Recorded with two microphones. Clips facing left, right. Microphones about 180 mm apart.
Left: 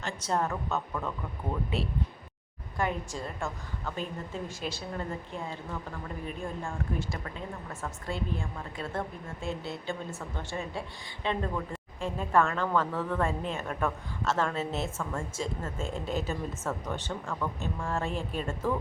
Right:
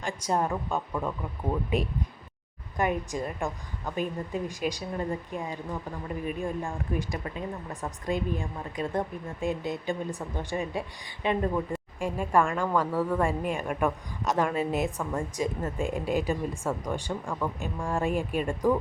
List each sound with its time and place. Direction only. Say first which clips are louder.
0.0 s speech: right 2 dB; 10° right (ahead or behind)